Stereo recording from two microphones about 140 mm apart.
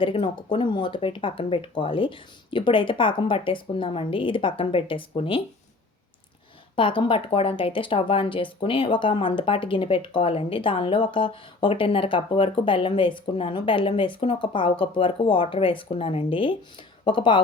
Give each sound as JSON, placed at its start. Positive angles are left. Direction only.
{"t": 0.0, "sound": "speech", "side_deg": 35}
{"t": 6.7, "sound": "speech", "side_deg": 35}